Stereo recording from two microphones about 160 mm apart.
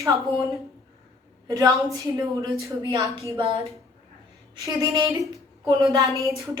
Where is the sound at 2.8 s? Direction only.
30° right (ahead or behind).